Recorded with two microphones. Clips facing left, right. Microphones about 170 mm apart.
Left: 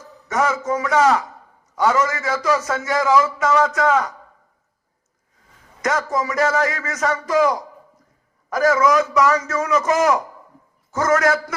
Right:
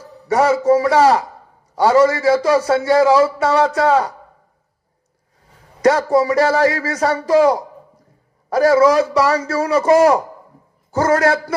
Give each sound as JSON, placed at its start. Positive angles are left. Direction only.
{"t": 0.0, "sound": "a man's voice", "side_deg": -35}
{"t": 5.8, "sound": "a man's voice", "side_deg": -35}